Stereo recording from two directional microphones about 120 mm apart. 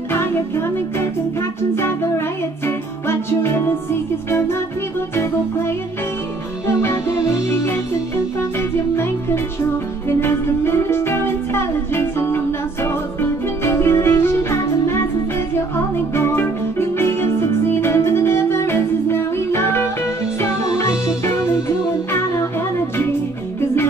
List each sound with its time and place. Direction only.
0.1 s music: 20° left (ahead or behind)
6.8 s music: 25° left (ahead or behind)